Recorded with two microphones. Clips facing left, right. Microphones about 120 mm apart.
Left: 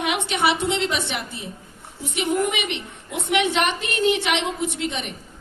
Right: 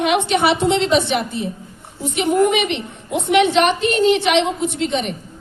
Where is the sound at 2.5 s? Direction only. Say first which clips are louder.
Right 8 dB; 30° right (ahead or behind).